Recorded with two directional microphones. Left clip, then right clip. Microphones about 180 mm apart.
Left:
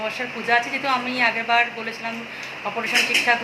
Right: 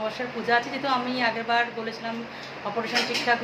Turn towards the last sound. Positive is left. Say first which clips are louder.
# left 4 dB
turn(degrees=0)  # may be behind; listen again after turning